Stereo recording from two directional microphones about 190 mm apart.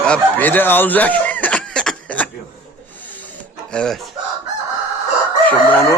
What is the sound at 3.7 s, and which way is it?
Speech, 5° left (ahead or behind).